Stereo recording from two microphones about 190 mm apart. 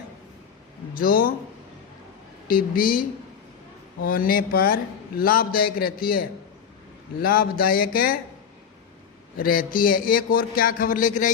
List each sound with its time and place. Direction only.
0.9 s a man's voice: 50° left (ahead or behind)
2.5 s a man's voice: 50° left (ahead or behind)
9.4 s a man's voice: 50° left (ahead or behind)